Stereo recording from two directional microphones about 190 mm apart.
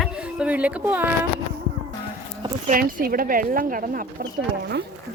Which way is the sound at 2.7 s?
45° right (ahead or behind).